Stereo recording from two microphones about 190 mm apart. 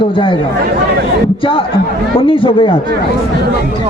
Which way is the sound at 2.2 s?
25° left (ahead or behind).